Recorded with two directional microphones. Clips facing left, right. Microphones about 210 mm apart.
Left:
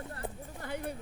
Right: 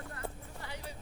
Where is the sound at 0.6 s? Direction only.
55° left (ahead or behind).